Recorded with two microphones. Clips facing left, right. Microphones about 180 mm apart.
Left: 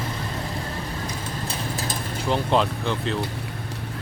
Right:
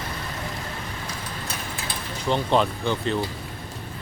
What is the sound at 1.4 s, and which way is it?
Vehicle, 40° left (ahead or behind).